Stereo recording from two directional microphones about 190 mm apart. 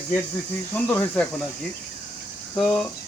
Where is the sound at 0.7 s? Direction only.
5° left (ahead or behind).